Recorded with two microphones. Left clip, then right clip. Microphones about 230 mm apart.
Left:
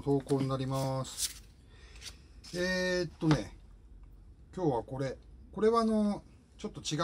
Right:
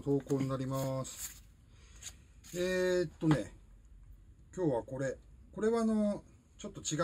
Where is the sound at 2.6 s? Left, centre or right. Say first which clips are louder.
Even; centre.